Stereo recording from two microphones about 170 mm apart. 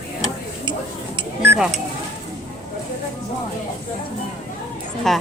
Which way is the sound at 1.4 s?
10° right (ahead or behind).